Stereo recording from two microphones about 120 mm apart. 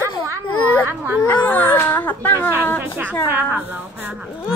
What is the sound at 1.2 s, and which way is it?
Speech, 15° left (ahead or behind).